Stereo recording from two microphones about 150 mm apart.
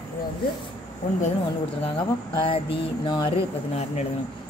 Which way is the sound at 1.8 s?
35° left (ahead or behind).